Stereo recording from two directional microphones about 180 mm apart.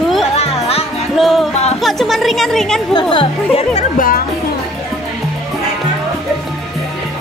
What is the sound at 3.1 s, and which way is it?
Speech, 35° left (ahead or behind).